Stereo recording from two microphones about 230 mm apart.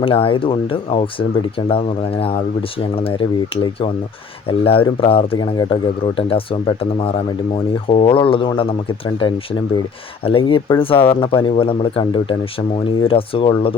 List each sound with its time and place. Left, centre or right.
0.0 s speech: left